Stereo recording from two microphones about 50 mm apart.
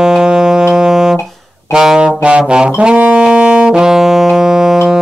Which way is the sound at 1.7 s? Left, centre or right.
Centre.